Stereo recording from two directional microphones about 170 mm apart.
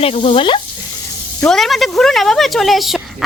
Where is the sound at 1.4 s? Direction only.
Centre (ahead or behind).